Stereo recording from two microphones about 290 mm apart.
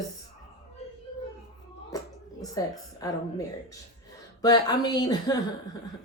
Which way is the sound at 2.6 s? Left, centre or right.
Centre.